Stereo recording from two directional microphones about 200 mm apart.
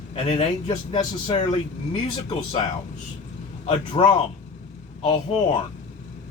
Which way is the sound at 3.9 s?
30° left (ahead or behind).